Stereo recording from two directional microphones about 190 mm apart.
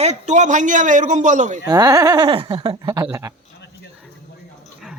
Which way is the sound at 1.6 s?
20° right (ahead or behind).